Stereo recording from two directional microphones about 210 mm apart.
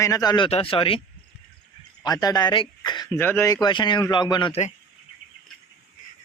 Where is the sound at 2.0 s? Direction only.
15° left (ahead or behind).